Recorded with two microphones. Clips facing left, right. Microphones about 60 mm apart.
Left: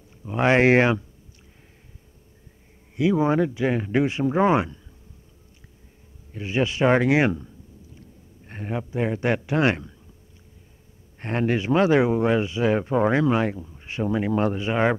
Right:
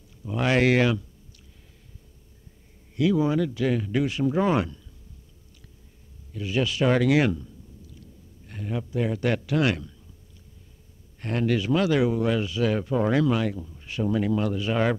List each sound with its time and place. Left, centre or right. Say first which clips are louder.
0.2 s speech: left 4 dB; left
3.0 s speech: left 2 dB; left
6.3 s speech: left 2 dB; left
11.1 s speech: left 1 dB; left